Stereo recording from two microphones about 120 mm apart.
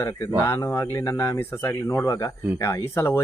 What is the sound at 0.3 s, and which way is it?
Speech, 25° left (ahead or behind).